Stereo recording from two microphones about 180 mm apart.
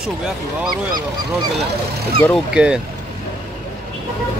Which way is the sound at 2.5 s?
5° right (ahead or behind).